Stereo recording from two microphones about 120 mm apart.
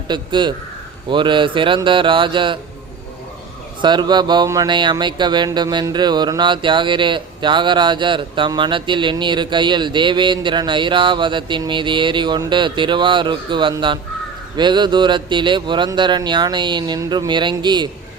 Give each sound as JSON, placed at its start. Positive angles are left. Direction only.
{"t": 0.1, "sound": "a man's voice", "side_deg": -40}
{"t": 3.8, "sound": "a man's voice", "side_deg": -40}